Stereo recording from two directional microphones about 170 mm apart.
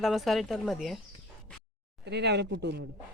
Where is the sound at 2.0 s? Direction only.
80° right.